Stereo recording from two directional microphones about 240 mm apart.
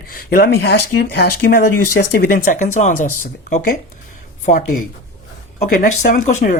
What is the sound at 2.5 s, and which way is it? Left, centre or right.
Speech, left.